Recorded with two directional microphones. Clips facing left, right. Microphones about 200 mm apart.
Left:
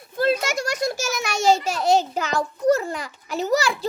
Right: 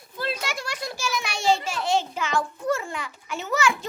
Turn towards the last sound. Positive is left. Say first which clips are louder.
# left 3 dB
turn(degrees=35)  # may be behind; listen again after turning